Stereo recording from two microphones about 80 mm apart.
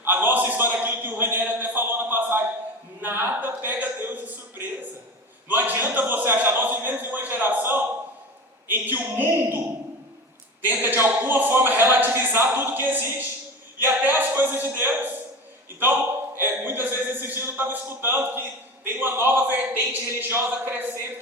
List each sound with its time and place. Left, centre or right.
0.0 s a sound: right
5.5 s a man's voice: right
10.6 s speech: right
16.4 s speech: right